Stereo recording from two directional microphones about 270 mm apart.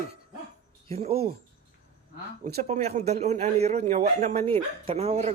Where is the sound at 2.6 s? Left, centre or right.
Right.